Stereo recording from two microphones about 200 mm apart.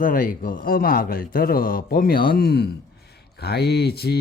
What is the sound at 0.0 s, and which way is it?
Speech, 45° left (ahead or behind).